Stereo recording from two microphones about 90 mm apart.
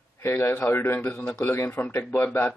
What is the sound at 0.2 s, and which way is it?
A man's voice, 25° left (ahead or behind).